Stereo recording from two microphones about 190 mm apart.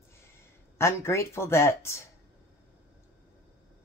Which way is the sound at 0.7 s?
15° left (ahead or behind).